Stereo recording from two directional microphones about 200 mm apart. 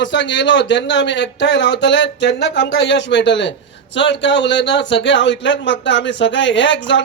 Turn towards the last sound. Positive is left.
turn(degrees=65)  # may be behind; listen again after turning